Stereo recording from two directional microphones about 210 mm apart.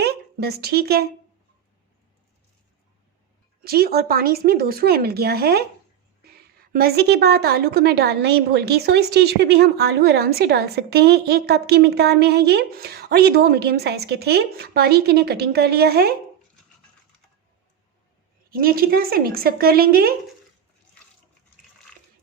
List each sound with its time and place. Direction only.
0.0 s speech: 50° right (ahead or behind)
3.6 s a woman's voice: 45° right (ahead or behind)
6.7 s a woman's voice: 50° right (ahead or behind)
18.5 s a woman's voice: 45° right (ahead or behind)